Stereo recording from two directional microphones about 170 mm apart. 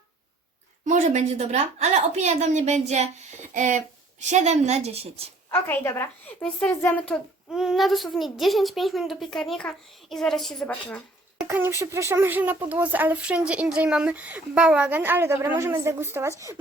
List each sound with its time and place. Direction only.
0.9 s a woman's voice: 45° right (ahead or behind)
5.5 s a woman's voice: 15° left (ahead or behind)
11.4 s speech: 15° right (ahead or behind)